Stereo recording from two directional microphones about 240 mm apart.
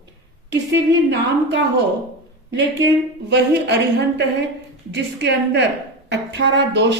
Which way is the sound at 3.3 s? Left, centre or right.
Right.